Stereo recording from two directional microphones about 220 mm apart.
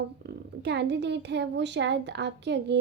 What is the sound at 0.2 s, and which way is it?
Speech, 50° right (ahead or behind).